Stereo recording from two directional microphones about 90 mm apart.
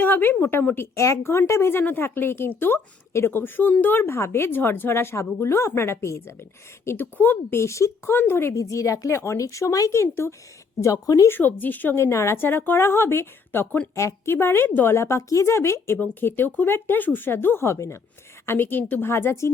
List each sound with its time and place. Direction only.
0.0 s speech: 25° left (ahead or behind)
0.9 s speech: 35° left (ahead or behind)
7.6 s speech: 35° left (ahead or behind)
11.3 s speech: 20° left (ahead or behind)
11.9 s speech: 30° left (ahead or behind)